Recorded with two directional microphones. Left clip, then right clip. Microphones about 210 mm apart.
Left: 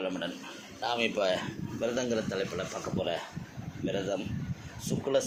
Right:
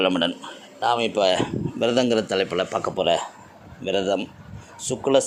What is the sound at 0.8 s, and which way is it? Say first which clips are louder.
A man's voice: right 9 dB; 30° right (ahead or behind).